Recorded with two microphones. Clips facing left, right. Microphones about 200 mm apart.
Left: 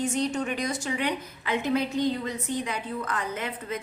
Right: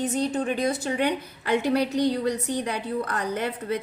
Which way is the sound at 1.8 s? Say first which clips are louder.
Right 4 dB; 85° right.